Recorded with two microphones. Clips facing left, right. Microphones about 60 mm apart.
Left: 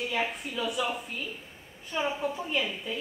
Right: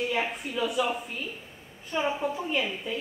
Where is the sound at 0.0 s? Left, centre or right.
Centre.